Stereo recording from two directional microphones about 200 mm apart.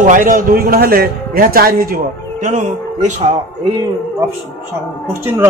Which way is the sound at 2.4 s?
35° right (ahead or behind).